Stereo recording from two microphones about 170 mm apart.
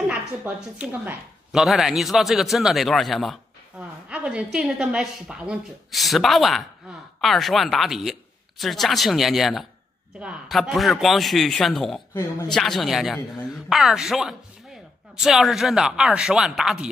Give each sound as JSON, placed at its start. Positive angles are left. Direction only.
{"t": 0.1, "sound": "a woman's voice", "side_deg": -5}
{"t": 12.1, "sound": "speech", "side_deg": 20}
{"t": 12.4, "sound": "a woman's voice", "side_deg": 0}